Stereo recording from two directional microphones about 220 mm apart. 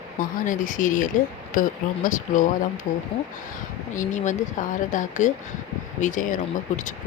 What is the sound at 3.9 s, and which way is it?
Speech, 35° left (ahead or behind).